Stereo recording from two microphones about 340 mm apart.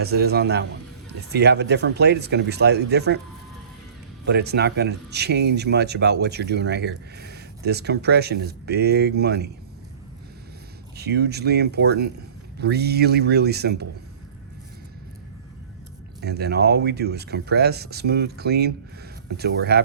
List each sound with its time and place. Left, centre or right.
0.0 s speech: right
4.3 s speech: right
10.9 s speech: right
16.2 s speech: right